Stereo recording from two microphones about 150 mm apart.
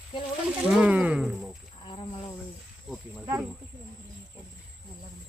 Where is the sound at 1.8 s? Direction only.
35° left (ahead or behind).